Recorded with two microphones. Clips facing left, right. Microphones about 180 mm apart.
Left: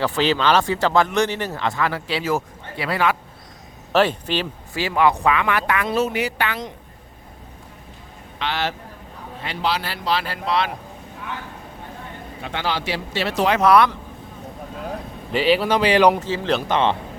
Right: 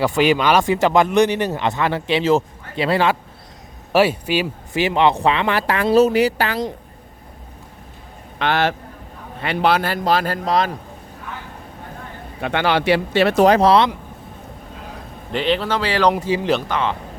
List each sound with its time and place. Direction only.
0.0 s speech: 10° right (ahead or behind); by 3.2 s 25° right (ahead or behind)
3.9 s speech: 10° right (ahead or behind)
4.7 s speech: 20° right (ahead or behind); by 6.7 s 35° right (ahead or behind)
8.4 s a man's voice: 55° right (ahead or behind)
12.4 s speech: 65° right (ahead or behind)
13.6 s speech: 25° right (ahead or behind)
15.3 s speech: 5° left (ahead or behind)
16.1 s speech: 15° right (ahead or behind)
16.6 s speech: 25° left (ahead or behind)